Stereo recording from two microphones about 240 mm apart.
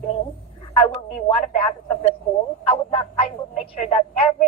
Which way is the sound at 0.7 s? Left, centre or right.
Centre.